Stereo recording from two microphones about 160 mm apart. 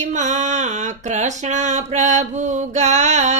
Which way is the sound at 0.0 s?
50° right (ahead or behind).